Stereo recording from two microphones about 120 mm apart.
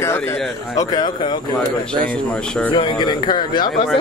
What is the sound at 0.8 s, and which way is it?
Speech, 35° left (ahead or behind).